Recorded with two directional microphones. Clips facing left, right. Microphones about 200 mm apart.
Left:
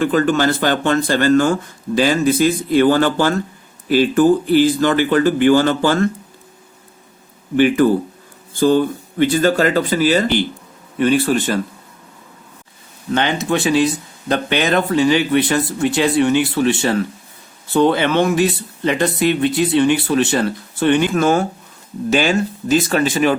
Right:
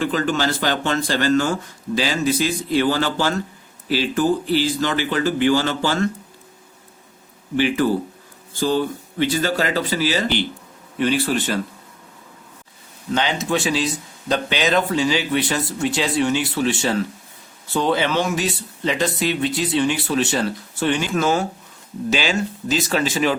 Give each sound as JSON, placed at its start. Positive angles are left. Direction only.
{"t": 0.0, "sound": "speech", "side_deg": 50}
{"t": 7.5, "sound": "speech", "side_deg": 50}
{"t": 13.1, "sound": "speech", "side_deg": 55}